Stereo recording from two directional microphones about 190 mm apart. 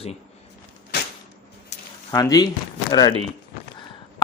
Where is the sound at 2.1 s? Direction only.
20° left (ahead or behind).